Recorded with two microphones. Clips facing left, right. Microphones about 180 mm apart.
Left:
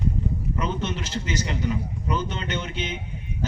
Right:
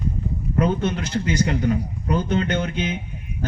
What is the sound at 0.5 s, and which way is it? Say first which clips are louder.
Speech: right 10 dB; 55° right (ahead or behind).